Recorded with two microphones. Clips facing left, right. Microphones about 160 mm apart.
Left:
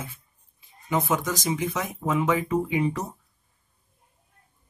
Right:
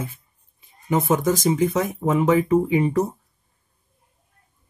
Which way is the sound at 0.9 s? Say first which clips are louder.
Right 6 dB; 50° right (ahead or behind).